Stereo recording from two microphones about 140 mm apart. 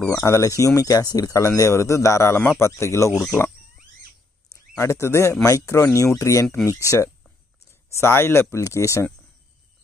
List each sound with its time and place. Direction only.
0.0 s speech: 20° left (ahead or behind)
4.7 s speech: 20° left (ahead or behind)